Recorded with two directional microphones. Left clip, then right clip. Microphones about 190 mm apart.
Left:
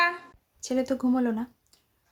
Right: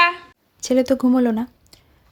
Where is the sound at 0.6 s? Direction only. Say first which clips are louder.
Right 10 dB; 35° right (ahead or behind).